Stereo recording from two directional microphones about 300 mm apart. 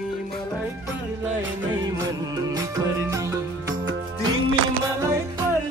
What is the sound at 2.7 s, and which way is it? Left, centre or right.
Music, centre.